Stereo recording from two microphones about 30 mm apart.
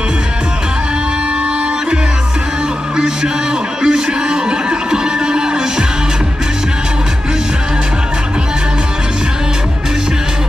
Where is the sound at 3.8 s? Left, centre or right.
Right.